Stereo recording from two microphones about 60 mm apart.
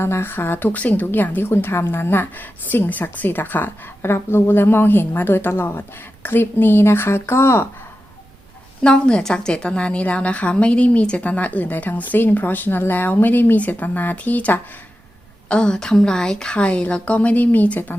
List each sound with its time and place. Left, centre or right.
0.0 s a woman's voice: left
8.8 s speech: centre
15.4 s a woman's voice: centre